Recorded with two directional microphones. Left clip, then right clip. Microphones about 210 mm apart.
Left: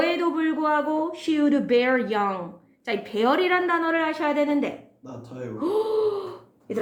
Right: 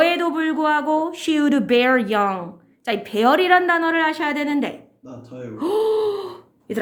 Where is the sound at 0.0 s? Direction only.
45° right (ahead or behind).